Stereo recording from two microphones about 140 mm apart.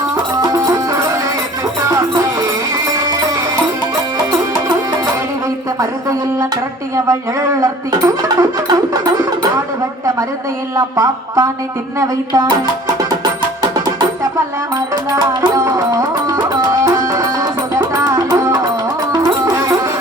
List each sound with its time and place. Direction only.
0.4 s music: 25° right (ahead or behind)
6.9 s music: 20° right (ahead or behind)
10.8 s music: 20° right (ahead or behind)
15.1 s music: 20° right (ahead or behind)